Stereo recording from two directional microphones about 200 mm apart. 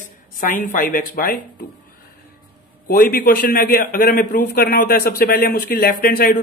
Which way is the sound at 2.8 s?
45° left (ahead or behind).